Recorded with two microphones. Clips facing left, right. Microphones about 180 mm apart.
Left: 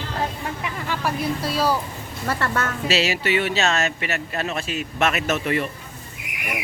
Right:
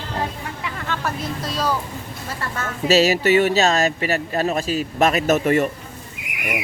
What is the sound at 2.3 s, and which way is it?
Speech, 70° left (ahead or behind).